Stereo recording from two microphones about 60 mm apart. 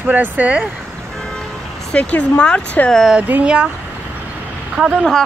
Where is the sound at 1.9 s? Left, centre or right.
Left.